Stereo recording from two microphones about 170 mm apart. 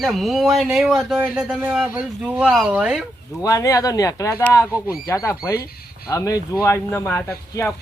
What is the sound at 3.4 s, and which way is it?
Speech, 20° left (ahead or behind).